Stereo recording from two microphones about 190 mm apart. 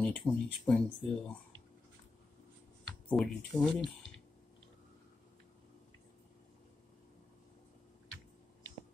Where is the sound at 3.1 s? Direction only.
5° left (ahead or behind).